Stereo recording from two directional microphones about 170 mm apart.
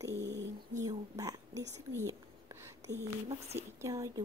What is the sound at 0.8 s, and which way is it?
Speech, 20° right (ahead or behind).